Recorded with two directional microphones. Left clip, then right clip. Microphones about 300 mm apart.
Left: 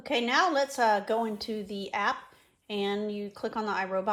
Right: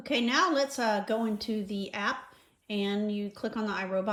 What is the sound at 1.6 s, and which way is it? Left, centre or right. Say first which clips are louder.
Speech: even; centre.